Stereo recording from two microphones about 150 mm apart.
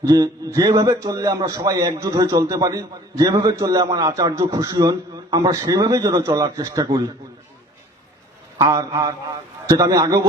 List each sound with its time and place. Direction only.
0.0 s a man's voice: 25° right (ahead or behind)
8.5 s a man's voice: 25° right (ahead or behind)